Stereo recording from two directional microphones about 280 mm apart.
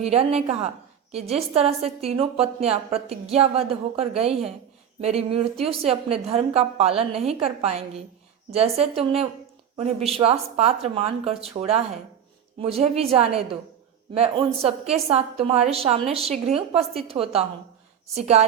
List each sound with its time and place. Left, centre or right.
0.0 s a woman's voice: right